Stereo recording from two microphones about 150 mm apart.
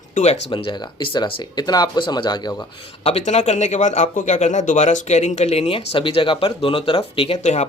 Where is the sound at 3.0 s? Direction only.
45° left (ahead or behind).